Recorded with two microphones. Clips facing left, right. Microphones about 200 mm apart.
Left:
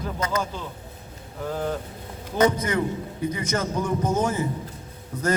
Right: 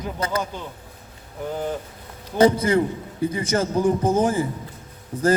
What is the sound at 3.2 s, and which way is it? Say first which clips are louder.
A man's voice: right 4 dB; 30° right (ahead or behind).